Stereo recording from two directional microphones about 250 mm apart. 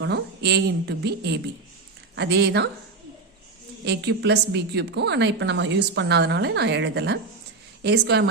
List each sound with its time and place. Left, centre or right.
0.0 s a woman's voice: right
3.8 s a woman's voice: right